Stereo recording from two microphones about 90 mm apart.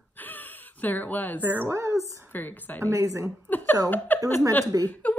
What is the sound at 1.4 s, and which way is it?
Speech, 20° right (ahead or behind).